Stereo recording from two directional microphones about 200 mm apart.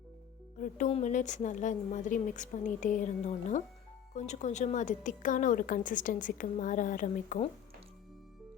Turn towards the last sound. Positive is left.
turn(degrees=40)  # may be behind; listen again after turning